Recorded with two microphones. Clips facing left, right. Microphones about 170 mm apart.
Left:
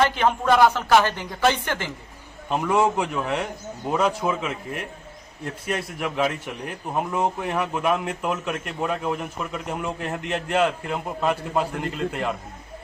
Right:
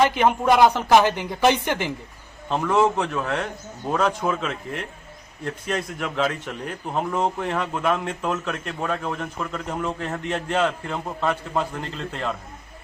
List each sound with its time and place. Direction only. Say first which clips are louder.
0.0 s a man's voice: right 2 dB; 15° right (ahead or behind)
2.5 s speech: right 1 dB; 10° left (ahead or behind)